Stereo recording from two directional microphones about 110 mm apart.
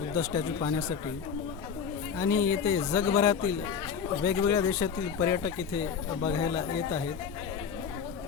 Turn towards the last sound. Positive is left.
turn(degrees=30)  # may be behind; listen again after turning